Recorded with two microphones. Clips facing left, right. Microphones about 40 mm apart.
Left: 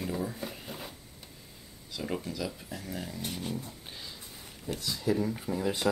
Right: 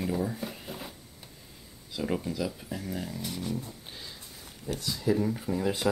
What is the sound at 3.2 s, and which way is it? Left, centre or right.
Speech, left.